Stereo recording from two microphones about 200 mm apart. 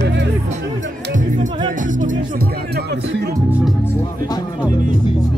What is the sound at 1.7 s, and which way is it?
Speech, 40° right (ahead or behind).